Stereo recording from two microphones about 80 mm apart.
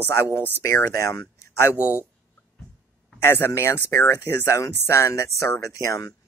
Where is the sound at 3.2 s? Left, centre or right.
Left.